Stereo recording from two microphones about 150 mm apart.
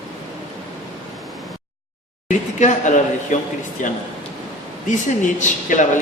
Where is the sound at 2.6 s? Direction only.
55° left (ahead or behind).